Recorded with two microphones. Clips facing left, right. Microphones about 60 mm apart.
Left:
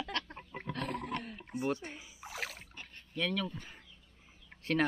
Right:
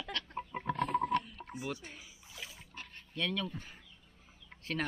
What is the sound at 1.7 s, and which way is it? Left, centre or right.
Speech, left.